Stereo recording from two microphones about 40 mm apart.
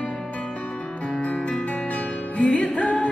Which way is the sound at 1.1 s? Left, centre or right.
Left.